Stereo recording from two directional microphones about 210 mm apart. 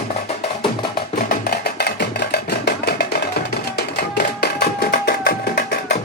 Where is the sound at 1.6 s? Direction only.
50° left (ahead or behind).